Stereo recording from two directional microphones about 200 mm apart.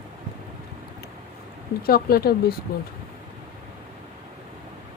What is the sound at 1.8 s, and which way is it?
Speech, 50° left (ahead or behind).